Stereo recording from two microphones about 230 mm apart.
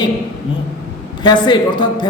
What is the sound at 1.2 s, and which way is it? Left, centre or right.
Speech, centre.